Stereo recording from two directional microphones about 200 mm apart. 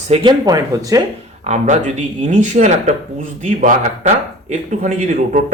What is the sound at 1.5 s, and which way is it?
Speech, 35° right (ahead or behind).